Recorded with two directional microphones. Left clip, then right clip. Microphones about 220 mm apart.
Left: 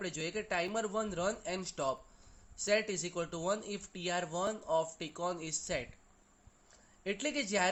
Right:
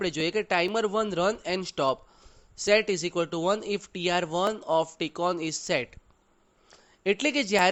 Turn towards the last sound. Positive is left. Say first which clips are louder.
# right 10 dB
turn(degrees=-45)  # may be behind; listen again after turning